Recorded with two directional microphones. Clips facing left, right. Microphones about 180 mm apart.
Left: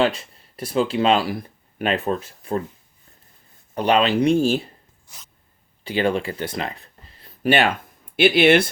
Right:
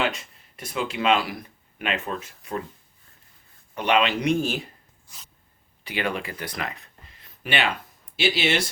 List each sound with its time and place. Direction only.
0.0 s speech: 30° left (ahead or behind)
3.8 s speech: 35° left (ahead or behind)
5.8 s speech: 30° left (ahead or behind); by 8.7 s 55° left (ahead or behind)